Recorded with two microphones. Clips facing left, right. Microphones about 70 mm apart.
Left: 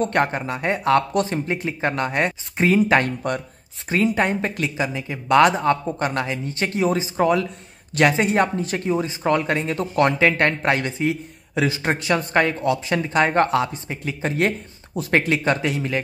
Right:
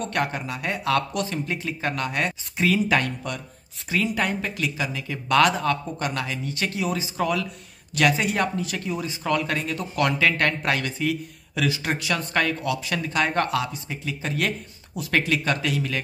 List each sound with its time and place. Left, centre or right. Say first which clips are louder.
0.0 s speech: left 6 dB; left